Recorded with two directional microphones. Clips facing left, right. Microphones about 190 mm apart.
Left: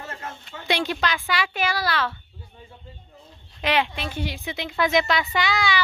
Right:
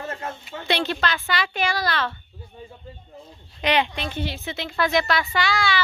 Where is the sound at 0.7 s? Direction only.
10° left (ahead or behind).